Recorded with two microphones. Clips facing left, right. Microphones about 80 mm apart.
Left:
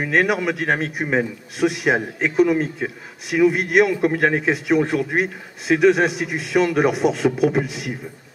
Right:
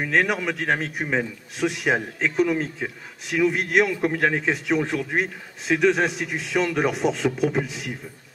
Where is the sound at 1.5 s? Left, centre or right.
Centre.